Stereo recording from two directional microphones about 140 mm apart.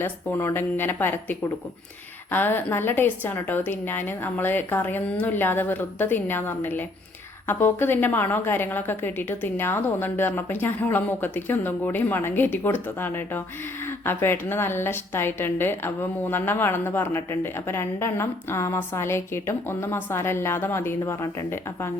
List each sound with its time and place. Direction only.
0.0 s a woman's voice: 15° left (ahead or behind)